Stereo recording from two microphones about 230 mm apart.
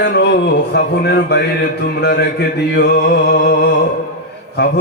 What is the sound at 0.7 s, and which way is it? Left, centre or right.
Speech, left.